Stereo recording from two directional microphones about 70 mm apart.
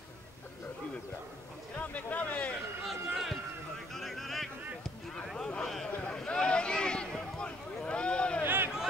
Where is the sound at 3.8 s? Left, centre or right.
Centre.